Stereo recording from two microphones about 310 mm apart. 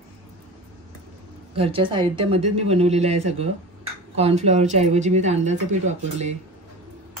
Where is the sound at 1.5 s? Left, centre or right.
Centre.